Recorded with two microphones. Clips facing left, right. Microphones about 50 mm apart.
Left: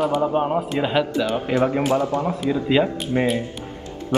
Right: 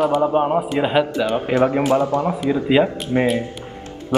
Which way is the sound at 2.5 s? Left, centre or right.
Centre.